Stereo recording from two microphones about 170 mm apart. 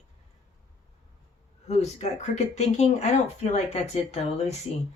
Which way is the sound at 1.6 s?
40° left (ahead or behind).